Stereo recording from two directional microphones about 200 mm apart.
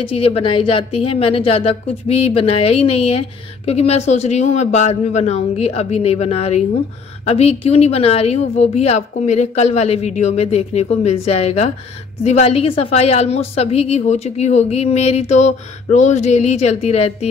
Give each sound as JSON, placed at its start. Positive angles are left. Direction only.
{"t": 0.0, "sound": "a woman's voice", "side_deg": 30}